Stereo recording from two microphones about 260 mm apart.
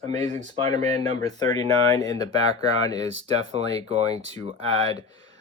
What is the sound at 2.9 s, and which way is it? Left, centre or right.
Speech, right.